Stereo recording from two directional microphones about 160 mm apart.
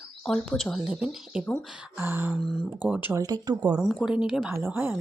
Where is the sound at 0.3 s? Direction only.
Centre (ahead or behind); by 3.5 s 25° right (ahead or behind).